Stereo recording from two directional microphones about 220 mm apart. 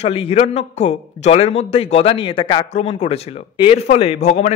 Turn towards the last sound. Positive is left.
turn(degrees=30)  # may be behind; listen again after turning